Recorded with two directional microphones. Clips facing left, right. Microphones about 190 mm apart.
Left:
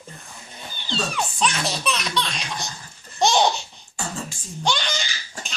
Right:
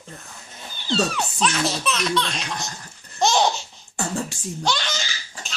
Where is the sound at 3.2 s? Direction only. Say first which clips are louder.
Left 1 dB; centre (ahead or behind).